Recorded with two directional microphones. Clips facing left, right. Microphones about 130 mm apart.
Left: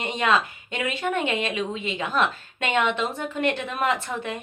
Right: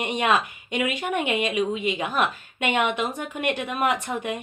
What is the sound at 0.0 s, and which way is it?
Speech, 15° right (ahead or behind).